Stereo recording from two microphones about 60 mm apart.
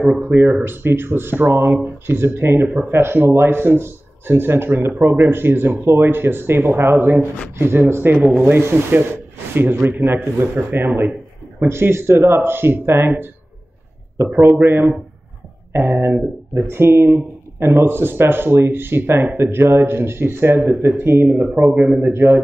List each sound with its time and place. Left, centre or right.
0.2 s speech: right
14.3 s speech: right
21.3 s speech: right
22.0 s speech: right